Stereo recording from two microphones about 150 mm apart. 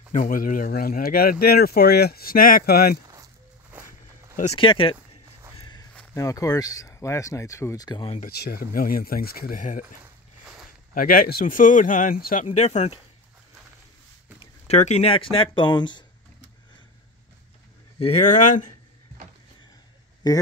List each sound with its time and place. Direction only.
0.1 s speech: 70° left (ahead or behind)
1.4 s speech: 90° left
3.7 s walk: 10° right (ahead or behind)
4.6 s speech: 35° left (ahead or behind)
5.6 s walk: 30° left (ahead or behind)
6.1 s speech: 20° left (ahead or behind)
8.2 s speech: 90° left; by 9.8 s 60° left (ahead or behind)
11.0 s speech: 75° left (ahead or behind); by 13.0 s 45° left (ahead or behind)
14.4 s speech: 50° left (ahead or behind); by 16.0 s 30° left (ahead or behind)
17.9 s speech: 45° left (ahead or behind)
20.2 s speech: 25° left (ahead or behind)